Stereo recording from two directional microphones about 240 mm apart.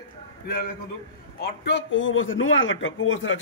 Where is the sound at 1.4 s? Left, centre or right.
Left.